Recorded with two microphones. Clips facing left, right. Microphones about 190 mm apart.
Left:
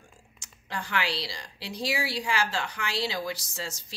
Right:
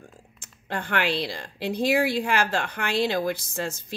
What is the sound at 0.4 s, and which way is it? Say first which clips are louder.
Speech: right 5 dB; 55° right (ahead or behind).